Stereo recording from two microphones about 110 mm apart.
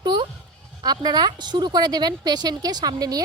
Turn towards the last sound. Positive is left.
turn(degrees=-35)  # may be behind; listen again after turning